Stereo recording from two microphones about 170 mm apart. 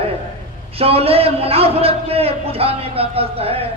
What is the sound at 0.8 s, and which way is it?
A man's voice, 35° right (ahead or behind).